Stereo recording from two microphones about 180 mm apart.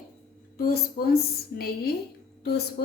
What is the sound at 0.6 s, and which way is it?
A woman's voice, 55° left (ahead or behind).